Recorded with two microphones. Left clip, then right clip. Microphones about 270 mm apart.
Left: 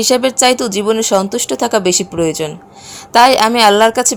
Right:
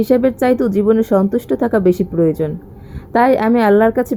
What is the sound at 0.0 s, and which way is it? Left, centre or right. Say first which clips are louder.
A woman's voice: left 3 dB; centre.